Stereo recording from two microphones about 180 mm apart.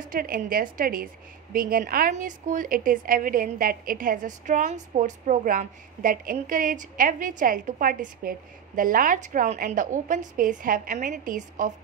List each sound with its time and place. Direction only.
0.0 s a woman's voice: 50° right (ahead or behind)